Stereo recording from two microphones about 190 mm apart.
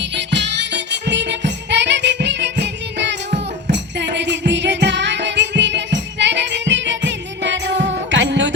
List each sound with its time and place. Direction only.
0.0 s music: 65° right (ahead or behind)